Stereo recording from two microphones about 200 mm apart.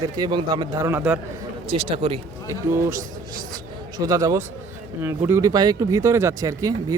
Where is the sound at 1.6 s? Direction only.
25° right (ahead or behind).